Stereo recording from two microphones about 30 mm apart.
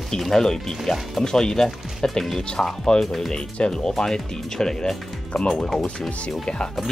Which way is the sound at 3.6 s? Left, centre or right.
Left.